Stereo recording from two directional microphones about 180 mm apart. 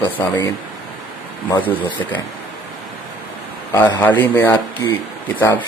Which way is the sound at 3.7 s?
20° left (ahead or behind).